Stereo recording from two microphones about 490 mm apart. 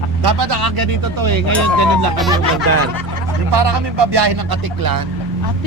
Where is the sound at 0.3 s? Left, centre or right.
Right.